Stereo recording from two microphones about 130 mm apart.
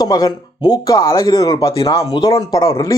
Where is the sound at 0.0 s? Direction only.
30° left (ahead or behind).